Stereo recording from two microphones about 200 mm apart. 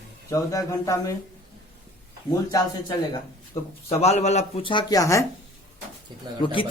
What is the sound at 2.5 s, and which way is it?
A man's voice, 20° left (ahead or behind).